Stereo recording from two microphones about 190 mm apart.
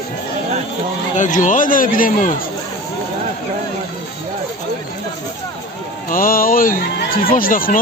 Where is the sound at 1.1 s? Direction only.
40° left (ahead or behind).